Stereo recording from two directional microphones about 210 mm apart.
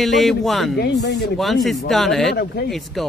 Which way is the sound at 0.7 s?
50° left (ahead or behind).